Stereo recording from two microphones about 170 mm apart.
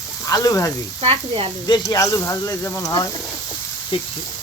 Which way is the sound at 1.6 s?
25° left (ahead or behind).